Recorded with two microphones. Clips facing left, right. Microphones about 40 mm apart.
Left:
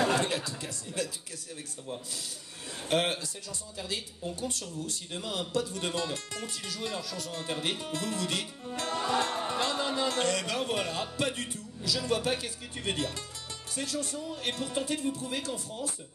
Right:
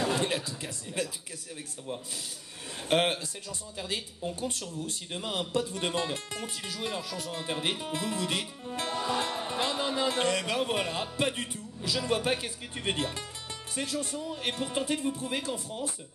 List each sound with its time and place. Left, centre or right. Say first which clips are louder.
0.6 s speech: right 1 dB; right
2.9 s speech: right 2 dB; right
8.7 s music: even; centre
9.5 s speech: even; centre